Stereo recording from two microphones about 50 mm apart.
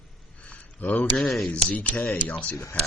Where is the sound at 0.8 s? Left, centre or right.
Left.